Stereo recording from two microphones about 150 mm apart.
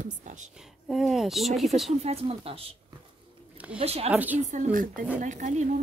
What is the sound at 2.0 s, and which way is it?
Speech, 40° right (ahead or behind).